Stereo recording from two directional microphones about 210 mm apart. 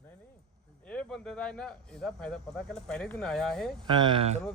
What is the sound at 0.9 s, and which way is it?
Speech, 5° left (ahead or behind).